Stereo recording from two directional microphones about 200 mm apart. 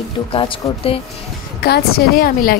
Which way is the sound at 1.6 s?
50° left (ahead or behind).